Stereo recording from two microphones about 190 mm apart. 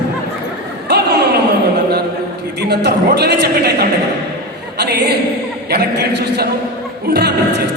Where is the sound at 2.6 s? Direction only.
60° right (ahead or behind).